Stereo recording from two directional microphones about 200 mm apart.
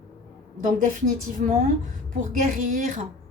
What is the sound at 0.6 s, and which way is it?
Speech, 40° right (ahead or behind).